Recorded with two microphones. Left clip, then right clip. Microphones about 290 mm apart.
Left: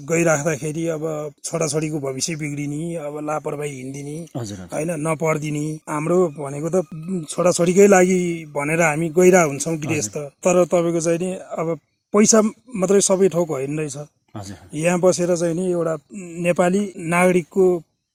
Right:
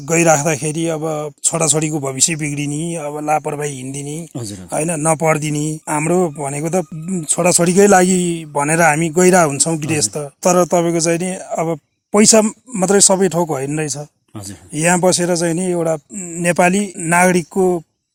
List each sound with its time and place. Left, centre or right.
0.1 s speech: right